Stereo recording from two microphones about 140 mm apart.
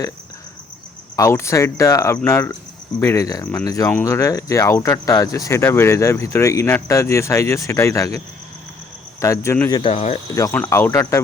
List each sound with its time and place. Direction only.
1.1 s speech: 20° left (ahead or behind)
9.2 s speech: 20° left (ahead or behind)
9.9 s speech: 50° left (ahead or behind)
10.3 s speech: 25° left (ahead or behind)